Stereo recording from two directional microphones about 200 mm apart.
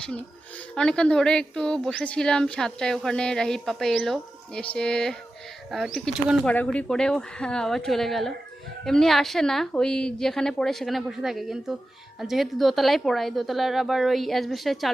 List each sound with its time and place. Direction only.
0.8 s a woman's voice: 5° left (ahead or behind)